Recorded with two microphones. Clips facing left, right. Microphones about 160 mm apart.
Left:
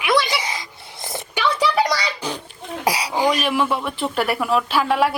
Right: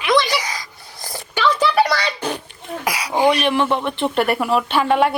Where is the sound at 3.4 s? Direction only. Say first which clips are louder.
Right 3 dB; 5° left (ahead or behind).